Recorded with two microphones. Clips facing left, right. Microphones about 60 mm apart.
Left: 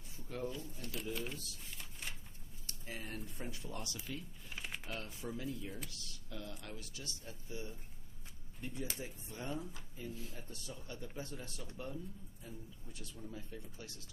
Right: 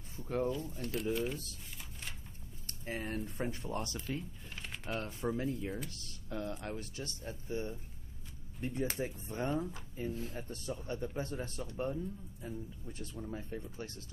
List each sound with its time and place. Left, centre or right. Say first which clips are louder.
0.2 s pigeon: right 8 dB; right
0.6 s speech: right 7 dB; right
1.1 s speech: right 7 dB; centre
1.8 s a sound: even; centre
2.6 s speech: right 7 dB; right
4.6 s typing: left 1 dB; centre
5.0 s speech: right 7 dB; right